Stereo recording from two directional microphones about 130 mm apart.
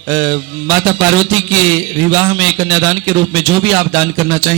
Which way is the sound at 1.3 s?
10° left (ahead or behind).